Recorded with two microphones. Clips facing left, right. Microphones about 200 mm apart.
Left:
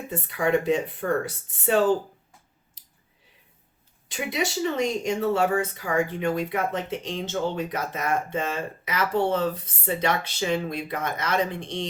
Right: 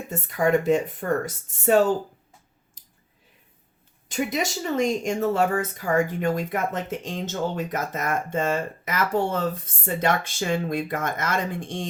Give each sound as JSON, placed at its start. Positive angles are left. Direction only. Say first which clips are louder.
{"t": 0.1, "sound": "speech", "louder": "right 2 dB", "side_deg": -45}
{"t": 4.1, "sound": "speech", "louder": "right 2 dB", "side_deg": -45}